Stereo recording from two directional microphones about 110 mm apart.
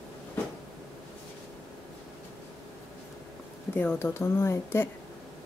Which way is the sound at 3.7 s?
20° left (ahead or behind).